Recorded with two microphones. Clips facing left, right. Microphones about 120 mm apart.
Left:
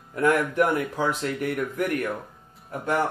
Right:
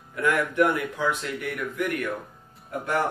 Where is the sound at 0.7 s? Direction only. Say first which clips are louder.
Left 1 dB; 35° left (ahead or behind).